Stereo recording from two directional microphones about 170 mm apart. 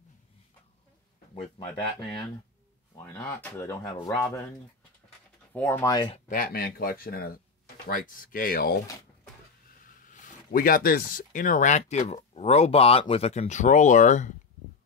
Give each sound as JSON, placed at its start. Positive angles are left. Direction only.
{"t": 1.8, "sound": "speech", "side_deg": 30}
{"t": 3.0, "sound": "speech", "side_deg": 15}
{"t": 5.5, "sound": "speech", "side_deg": 10}
{"t": 6.1, "sound": "speech", "side_deg": 50}
{"t": 9.8, "sound": "speech", "side_deg": 50}